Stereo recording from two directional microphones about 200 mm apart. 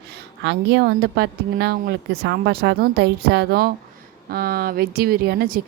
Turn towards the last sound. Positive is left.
turn(degrees=-50)  # may be behind; listen again after turning